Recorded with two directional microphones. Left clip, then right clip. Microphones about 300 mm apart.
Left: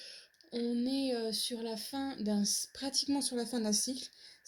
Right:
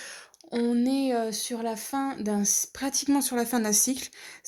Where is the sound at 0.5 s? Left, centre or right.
Right.